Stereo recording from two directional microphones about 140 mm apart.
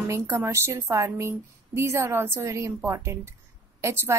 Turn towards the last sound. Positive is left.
turn(degrees=-20)  # may be behind; listen again after turning